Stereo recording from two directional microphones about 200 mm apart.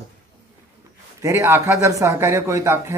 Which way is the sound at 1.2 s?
15° right (ahead or behind).